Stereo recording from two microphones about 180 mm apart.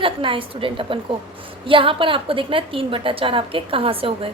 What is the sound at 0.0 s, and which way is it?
A woman's voice, 30° right (ahead or behind).